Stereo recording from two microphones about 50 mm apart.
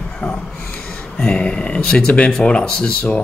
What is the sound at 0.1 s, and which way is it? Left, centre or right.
Speech, centre.